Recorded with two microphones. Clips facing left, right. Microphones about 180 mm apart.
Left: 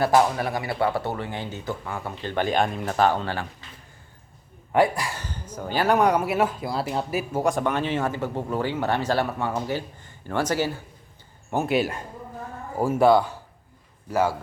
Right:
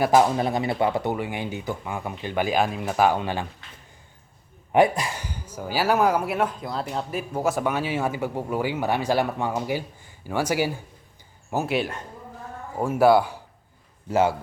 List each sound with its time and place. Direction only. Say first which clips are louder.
0.0 s speech: right 1 dB; 20° right (ahead or behind)
4.7 s speech: right 2 dB; 20° right (ahead or behind); by 7.4 s 5° left (ahead or behind)
7.4 s speech: right 1 dB; 5° right (ahead or behind)
11.5 s speech: left 2 dB; centre (ahead or behind)
14.1 s a man's voice: right 2 dB; 20° right (ahead or behind)